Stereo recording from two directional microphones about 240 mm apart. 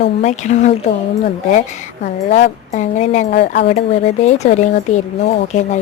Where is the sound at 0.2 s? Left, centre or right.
Left.